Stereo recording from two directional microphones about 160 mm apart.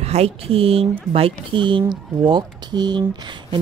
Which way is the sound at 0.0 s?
40° right (ahead or behind).